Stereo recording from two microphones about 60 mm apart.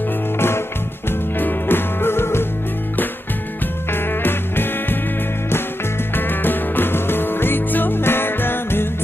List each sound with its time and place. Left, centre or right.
0.4 s music: left
3.9 s music: left
6.1 s music: left